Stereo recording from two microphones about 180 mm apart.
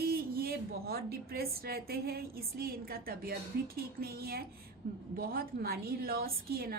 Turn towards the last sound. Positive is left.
turn(degrees=-55)  # may be behind; listen again after turning